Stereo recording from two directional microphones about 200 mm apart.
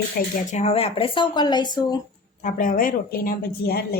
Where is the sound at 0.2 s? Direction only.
50° left (ahead or behind).